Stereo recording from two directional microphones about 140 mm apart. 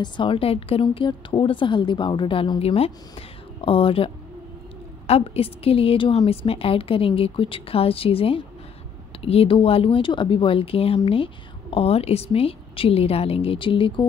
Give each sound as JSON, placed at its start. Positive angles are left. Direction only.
{"t": 0.0, "sound": "a woman's voice", "side_deg": 40}